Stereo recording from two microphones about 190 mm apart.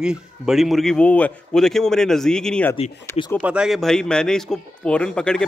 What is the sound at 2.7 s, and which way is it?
Speech, 30° left (ahead or behind).